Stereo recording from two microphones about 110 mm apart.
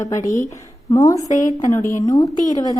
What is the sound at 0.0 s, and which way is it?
A woman's voice, 30° left (ahead or behind).